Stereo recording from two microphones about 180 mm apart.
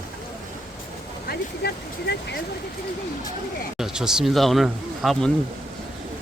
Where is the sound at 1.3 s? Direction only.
60° left (ahead or behind).